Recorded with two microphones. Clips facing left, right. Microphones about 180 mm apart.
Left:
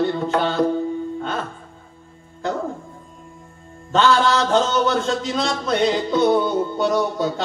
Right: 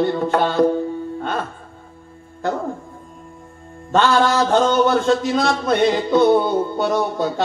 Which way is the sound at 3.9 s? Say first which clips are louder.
Right 1 dB; 55° right (ahead or behind).